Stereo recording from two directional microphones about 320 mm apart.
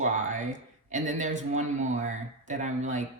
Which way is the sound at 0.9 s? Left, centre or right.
Right.